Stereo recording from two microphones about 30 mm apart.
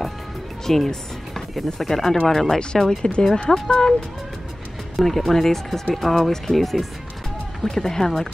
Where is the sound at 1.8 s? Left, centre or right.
Centre.